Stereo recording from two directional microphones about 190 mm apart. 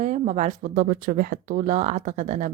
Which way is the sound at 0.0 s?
35° right (ahead or behind).